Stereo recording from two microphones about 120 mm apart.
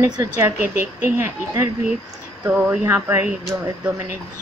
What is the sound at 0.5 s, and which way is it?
Speech, 15° right (ahead or behind).